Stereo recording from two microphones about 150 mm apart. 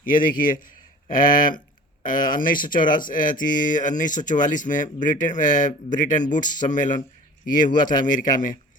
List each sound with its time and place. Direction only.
0.2 s speech: 65° left (ahead or behind)